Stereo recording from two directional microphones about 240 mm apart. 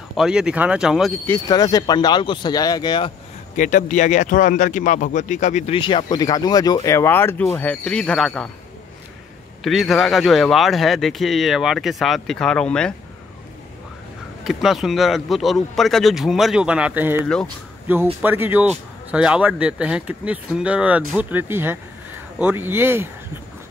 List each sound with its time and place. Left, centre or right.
0.1 s speech: centre
1.2 s speech: centre
3.5 s speech: left; by 8.5 s centre
9.6 s speech: centre
14.4 s speech: centre